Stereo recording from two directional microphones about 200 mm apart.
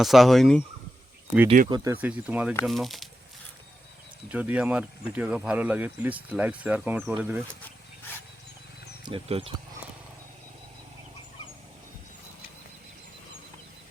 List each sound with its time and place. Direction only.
0.0 s speech: centre (ahead or behind)
1.7 s speech: 15° right (ahead or behind); by 3.1 s centre (ahead or behind)
4.3 s speech: 5° right (ahead or behind)
9.0 s speech: 25° right (ahead or behind)